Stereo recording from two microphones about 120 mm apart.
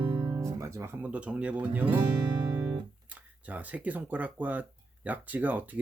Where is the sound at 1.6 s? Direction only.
15° right (ahead or behind).